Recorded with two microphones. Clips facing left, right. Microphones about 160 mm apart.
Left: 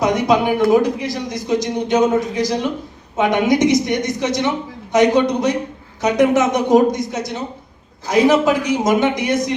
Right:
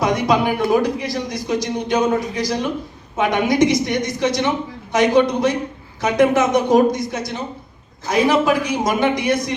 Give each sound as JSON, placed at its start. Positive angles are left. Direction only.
{"t": 0.0, "sound": "speech", "side_deg": 20}